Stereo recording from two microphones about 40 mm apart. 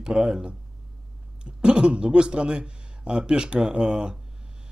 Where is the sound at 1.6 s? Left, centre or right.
Right.